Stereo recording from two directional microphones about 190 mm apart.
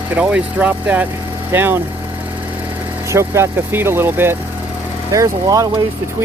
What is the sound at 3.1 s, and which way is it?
Speech, 15° right (ahead or behind).